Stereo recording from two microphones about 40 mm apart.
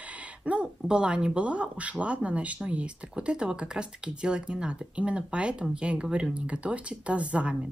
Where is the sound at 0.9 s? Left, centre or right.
Right.